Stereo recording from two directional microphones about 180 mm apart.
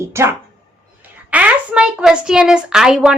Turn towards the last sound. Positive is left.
turn(degrees=-5)  # may be behind; listen again after turning